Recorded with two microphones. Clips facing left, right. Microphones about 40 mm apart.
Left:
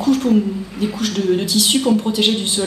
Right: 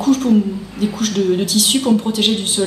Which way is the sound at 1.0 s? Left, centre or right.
Centre.